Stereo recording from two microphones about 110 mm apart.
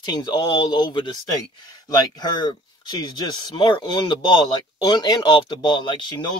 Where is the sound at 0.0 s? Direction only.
40° left (ahead or behind).